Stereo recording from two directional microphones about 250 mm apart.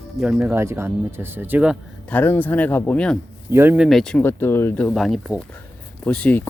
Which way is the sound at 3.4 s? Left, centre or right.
Centre.